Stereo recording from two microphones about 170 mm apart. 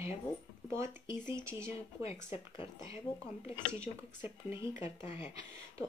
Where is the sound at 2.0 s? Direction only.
35° left (ahead or behind).